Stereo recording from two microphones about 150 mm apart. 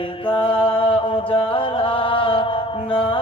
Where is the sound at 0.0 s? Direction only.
35° left (ahead or behind).